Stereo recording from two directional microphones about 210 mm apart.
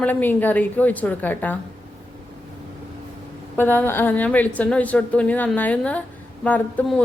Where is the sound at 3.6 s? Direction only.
10° left (ahead or behind).